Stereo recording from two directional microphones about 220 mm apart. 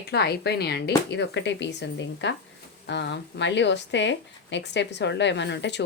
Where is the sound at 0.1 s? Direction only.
50° left (ahead or behind).